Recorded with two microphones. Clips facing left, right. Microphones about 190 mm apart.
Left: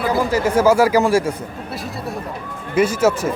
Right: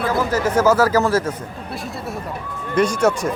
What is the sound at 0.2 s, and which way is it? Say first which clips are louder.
A man's voice: left 2 dB; 10° left (ahead or behind).